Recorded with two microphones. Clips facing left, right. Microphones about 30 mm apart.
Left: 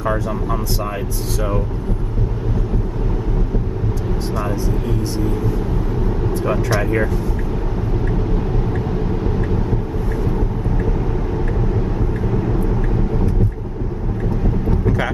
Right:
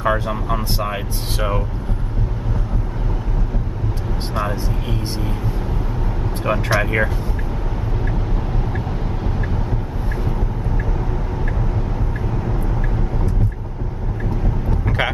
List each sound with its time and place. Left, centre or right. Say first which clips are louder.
0.0 s speech: right 1 dB; right
6.4 s speech: right 2 dB; right
12.3 s vehicle: left 5 dB; centre